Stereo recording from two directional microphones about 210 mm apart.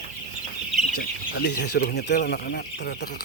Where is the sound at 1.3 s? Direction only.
55° left (ahead or behind).